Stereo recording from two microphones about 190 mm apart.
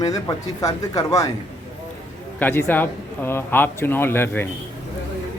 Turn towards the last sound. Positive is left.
turn(degrees=10)  # may be behind; listen again after turning